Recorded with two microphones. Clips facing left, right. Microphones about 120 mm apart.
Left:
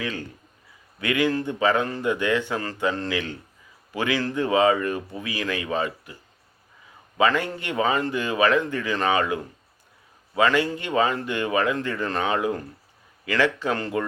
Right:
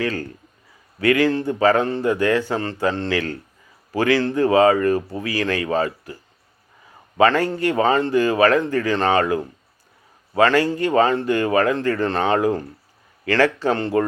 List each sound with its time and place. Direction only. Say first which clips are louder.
0.0 s speech: right 6 dB; 40° right (ahead or behind)
7.2 s speech: right 5 dB; 40° right (ahead or behind)